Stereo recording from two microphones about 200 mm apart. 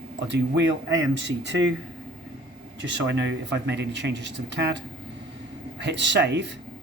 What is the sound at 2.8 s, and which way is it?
Speech, 60° right (ahead or behind).